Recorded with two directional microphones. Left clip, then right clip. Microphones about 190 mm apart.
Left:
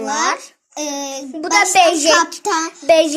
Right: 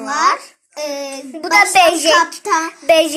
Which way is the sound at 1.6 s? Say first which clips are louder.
Right 1 dB; 35° left (ahead or behind).